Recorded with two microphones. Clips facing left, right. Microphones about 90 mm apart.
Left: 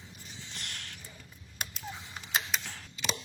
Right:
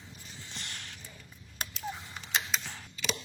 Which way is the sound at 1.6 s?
5° left (ahead or behind).